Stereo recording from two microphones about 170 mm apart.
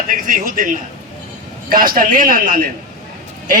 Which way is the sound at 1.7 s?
60° right (ahead or behind).